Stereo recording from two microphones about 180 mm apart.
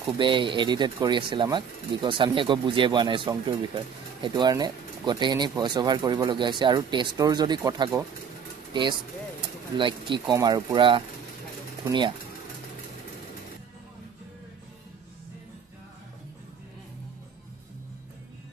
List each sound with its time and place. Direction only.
0.2 s speech: 25° right (ahead or behind)
9.4 s speech: 25° right (ahead or behind)